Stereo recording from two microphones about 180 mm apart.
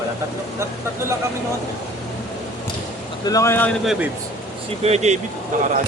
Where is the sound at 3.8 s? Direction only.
5° right (ahead or behind).